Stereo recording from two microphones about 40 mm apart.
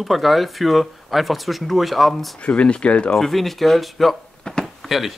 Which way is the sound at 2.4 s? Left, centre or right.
Left.